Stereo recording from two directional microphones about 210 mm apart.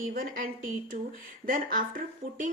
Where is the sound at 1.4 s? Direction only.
40° right (ahead or behind).